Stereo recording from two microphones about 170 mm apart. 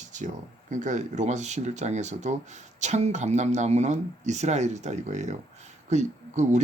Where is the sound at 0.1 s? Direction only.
45° right (ahead or behind).